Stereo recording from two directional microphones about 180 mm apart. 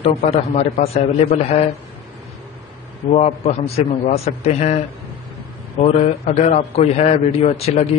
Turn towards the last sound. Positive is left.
turn(degrees=35)  # may be behind; listen again after turning